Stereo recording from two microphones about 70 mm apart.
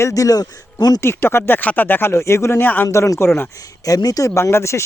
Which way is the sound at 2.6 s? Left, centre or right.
Left.